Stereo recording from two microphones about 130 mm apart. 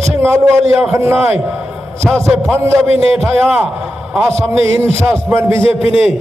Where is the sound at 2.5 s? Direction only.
20° right (ahead or behind).